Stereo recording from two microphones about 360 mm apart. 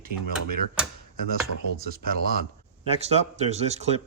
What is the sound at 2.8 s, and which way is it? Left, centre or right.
Speech, centre.